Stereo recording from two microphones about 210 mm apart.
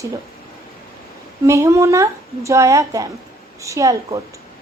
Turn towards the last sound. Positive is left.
turn(degrees=-15)  # may be behind; listen again after turning